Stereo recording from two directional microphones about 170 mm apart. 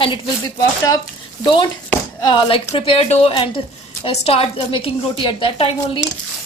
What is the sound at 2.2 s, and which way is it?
A woman's voice, 30° left (ahead or behind).